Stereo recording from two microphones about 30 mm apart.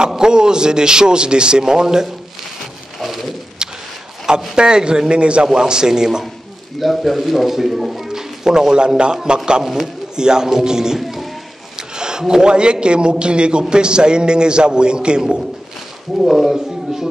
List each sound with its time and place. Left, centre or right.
0.2 s a man's voice: right
3.0 s a sound: centre
4.6 s a man's voice: right
6.8 s a man's voice: centre
8.1 s speech: right
10.1 s a man's voice: right
11.0 s music: centre
12.0 s a sound: right
12.4 s a man's voice: right
16.2 s a man's voice: centre